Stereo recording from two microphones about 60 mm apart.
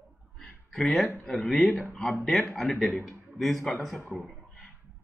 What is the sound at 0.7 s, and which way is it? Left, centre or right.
Speech, centre.